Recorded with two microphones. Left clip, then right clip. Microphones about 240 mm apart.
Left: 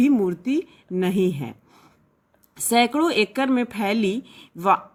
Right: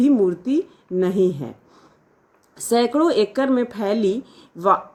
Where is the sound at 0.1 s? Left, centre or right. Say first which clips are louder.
Right 4 dB; left.